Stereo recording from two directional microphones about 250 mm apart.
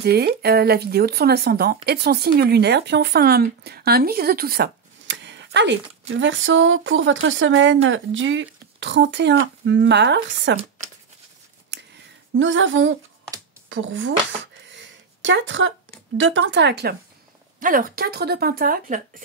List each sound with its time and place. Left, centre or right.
0.0 s speech: right
12.4 s speech: right
14.7 s a sound: right
16.2 s speech: right